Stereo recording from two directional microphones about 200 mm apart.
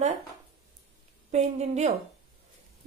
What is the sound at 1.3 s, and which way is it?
Speech, 35° right (ahead or behind).